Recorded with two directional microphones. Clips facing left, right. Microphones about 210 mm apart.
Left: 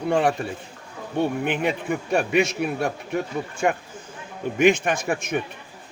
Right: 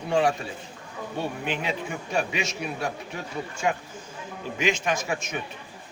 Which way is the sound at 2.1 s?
55° left (ahead or behind).